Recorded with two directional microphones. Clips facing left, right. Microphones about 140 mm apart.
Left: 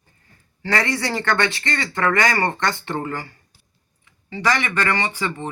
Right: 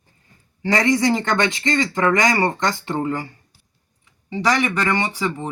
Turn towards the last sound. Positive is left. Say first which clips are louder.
# right 2 dB
turn(degrees=-10)  # may be behind; listen again after turning